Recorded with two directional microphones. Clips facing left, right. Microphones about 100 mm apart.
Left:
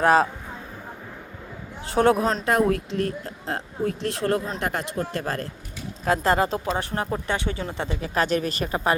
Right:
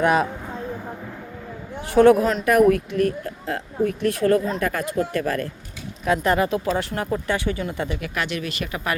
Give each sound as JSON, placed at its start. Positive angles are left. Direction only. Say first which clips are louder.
{"t": 0.0, "sound": "speech", "louder": "left 1 dB", "side_deg": 35}
{"t": 1.8, "sound": "speech", "louder": "right 5 dB", "side_deg": 30}